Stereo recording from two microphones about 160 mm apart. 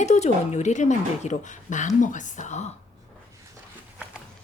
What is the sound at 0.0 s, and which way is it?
Speech, 45° left (ahead or behind).